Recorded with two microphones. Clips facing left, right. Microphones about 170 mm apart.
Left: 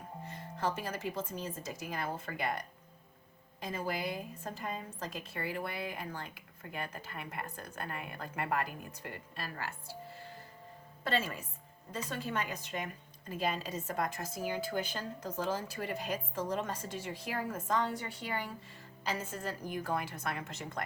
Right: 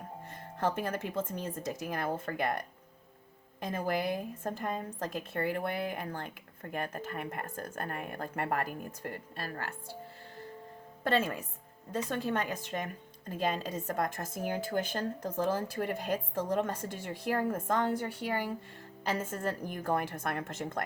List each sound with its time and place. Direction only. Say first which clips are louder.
0.3 s a woman's voice: right 3 dB; 50° right (ahead or behind)
11.0 s a woman's voice: right 5 dB; 55° right (ahead or behind)